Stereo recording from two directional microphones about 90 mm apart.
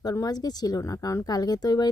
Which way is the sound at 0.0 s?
45° left (ahead or behind).